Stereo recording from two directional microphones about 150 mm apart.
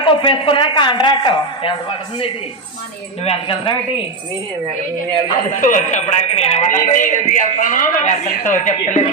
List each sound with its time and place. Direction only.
0.0 s a woman's voice: 35° left (ahead or behind)
3.2 s a woman's voice: 35° left (ahead or behind)
5.5 s a man's voice: 60° left (ahead or behind)